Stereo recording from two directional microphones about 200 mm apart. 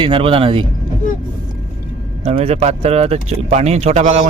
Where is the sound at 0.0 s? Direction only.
25° right (ahead or behind).